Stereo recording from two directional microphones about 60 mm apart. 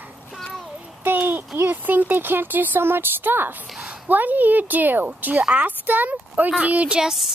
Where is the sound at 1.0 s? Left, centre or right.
Right.